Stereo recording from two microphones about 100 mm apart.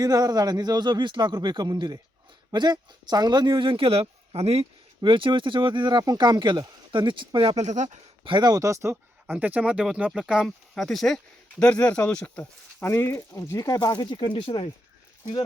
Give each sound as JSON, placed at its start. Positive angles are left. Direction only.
{"t": 0.0, "sound": "speech", "side_deg": -40}
{"t": 4.3, "sound": "speech", "side_deg": -85}
{"t": 5.0, "sound": "speech", "side_deg": -60}
{"t": 8.2, "sound": "speech", "side_deg": -55}
{"t": 8.4, "sound": "speech", "side_deg": -35}
{"t": 9.2, "sound": "speech", "side_deg": -15}
{"t": 13.7, "sound": "speech", "side_deg": 45}